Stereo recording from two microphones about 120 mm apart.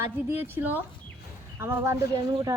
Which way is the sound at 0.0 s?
20° right (ahead or behind).